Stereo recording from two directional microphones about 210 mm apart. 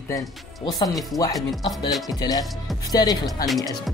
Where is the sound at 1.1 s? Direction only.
Centre (ahead or behind).